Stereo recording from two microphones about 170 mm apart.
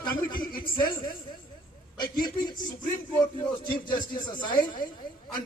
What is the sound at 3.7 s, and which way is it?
Speech, 25° left (ahead or behind).